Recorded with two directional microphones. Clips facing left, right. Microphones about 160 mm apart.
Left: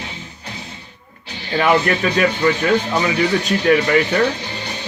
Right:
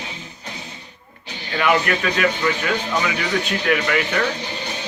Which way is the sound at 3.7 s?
30° left (ahead or behind).